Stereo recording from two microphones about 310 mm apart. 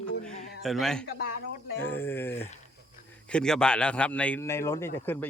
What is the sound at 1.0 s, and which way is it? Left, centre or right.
Speech, left.